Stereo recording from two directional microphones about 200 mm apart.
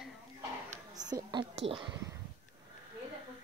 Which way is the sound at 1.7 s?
25° right (ahead or behind).